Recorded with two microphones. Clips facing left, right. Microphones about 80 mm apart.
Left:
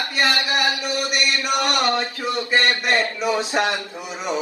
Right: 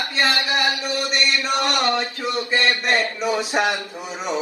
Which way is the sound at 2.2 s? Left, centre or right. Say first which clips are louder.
Left 1 dB; left.